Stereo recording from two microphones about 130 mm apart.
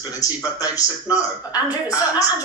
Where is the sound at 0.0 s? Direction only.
25° left (ahead or behind).